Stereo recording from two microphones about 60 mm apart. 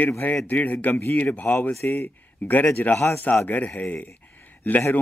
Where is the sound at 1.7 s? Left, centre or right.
Left.